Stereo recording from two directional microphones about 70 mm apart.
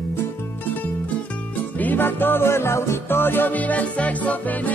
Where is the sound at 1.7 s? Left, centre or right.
Left.